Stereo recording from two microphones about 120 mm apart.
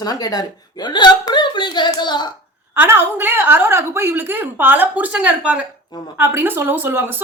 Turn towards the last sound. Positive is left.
turn(degrees=-20)  # may be behind; listen again after turning